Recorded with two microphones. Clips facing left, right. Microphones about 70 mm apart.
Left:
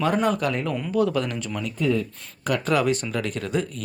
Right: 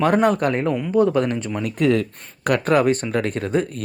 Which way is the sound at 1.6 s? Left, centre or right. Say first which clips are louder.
Right 5 dB; right.